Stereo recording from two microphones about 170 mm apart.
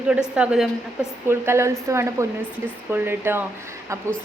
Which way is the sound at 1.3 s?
15° right (ahead or behind).